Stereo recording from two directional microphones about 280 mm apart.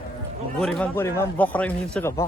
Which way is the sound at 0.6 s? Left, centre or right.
Centre.